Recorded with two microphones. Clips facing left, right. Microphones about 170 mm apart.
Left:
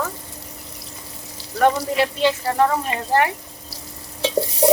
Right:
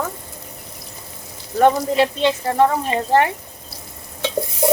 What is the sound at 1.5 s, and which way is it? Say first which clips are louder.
Speech: right 3 dB; 25° right (ahead or behind).